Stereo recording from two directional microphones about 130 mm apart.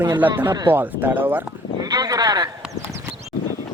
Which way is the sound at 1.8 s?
30° right (ahead or behind).